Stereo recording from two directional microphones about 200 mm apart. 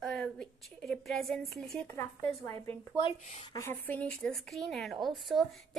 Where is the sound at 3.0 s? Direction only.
30° left (ahead or behind).